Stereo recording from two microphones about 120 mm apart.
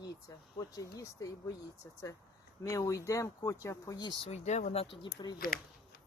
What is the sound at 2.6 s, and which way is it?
Speech, 25° left (ahead or behind).